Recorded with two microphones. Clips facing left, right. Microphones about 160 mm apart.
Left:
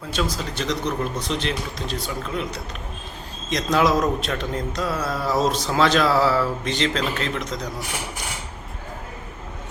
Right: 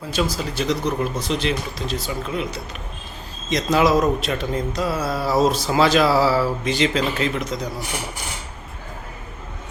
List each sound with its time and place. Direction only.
0.1 s a man's voice: 5° right (ahead or behind)